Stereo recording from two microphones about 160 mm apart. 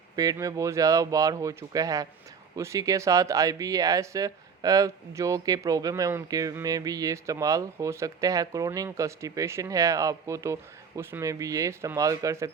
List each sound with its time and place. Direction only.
0.2 s speech: 20° right (ahead or behind)